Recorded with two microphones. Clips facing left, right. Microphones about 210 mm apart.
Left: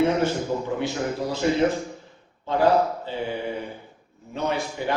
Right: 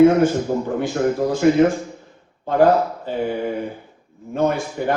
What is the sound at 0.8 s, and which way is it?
Speech, 50° right (ahead or behind).